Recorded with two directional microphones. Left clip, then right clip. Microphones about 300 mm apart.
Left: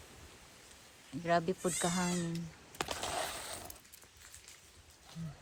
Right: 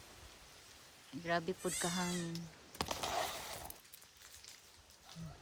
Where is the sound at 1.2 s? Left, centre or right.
Centre.